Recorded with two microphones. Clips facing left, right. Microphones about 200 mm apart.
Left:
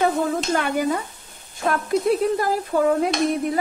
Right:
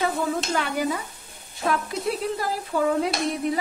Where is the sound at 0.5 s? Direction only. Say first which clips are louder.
Left 4 dB; 50° left (ahead or behind).